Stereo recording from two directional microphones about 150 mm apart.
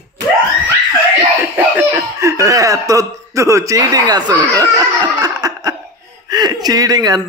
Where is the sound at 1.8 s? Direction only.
20° right (ahead or behind).